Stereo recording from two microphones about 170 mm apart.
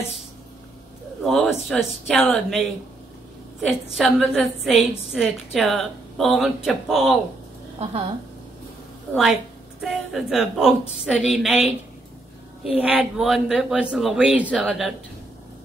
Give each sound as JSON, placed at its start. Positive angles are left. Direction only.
{"t": 1.2, "sound": "a woman's voice", "side_deg": 0}
{"t": 3.8, "sound": "a woman's voice", "side_deg": 0}
{"t": 9.1, "sound": "a woman's voice", "side_deg": -5}